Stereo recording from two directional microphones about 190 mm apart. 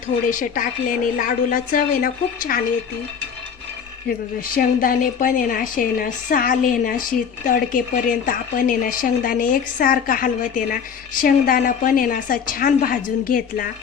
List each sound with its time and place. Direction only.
0.3 s a woman's voice: 45° left (ahead or behind)
4.4 s a woman's voice: 50° left (ahead or behind)